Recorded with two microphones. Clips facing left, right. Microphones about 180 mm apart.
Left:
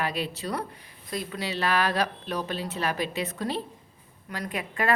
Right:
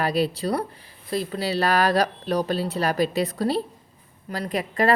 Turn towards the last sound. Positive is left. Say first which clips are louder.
# right 6 dB
turn(degrees=-35)  # may be behind; listen again after turning